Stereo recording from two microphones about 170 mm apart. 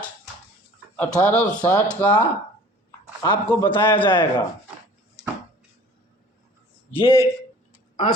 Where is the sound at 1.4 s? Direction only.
25° left (ahead or behind).